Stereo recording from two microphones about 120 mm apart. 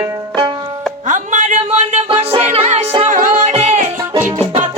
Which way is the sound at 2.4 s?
70° right (ahead or behind).